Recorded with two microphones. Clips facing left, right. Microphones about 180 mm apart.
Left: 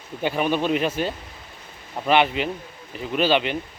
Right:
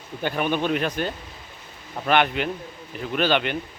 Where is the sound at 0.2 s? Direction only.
5° left (ahead or behind).